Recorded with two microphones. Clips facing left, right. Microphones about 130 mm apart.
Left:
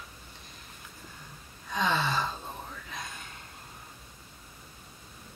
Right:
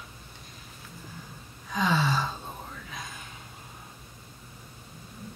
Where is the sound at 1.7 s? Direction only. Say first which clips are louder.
Right 2 dB; centre (ahead or behind).